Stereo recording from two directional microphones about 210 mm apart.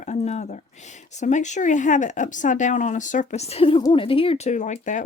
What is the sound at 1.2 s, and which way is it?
Speech, 35° left (ahead or behind).